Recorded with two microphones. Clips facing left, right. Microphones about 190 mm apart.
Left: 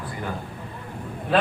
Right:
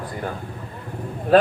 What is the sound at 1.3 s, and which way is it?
Speech, 45° right (ahead or behind).